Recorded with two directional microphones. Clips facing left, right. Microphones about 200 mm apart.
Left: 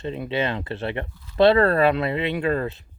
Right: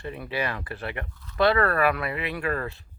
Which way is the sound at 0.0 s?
25° left (ahead or behind).